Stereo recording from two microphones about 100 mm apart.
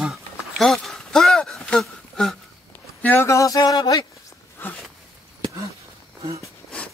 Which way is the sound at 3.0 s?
25° left (ahead or behind).